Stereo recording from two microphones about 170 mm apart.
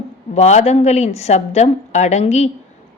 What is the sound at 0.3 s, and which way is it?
Speech, 40° left (ahead or behind).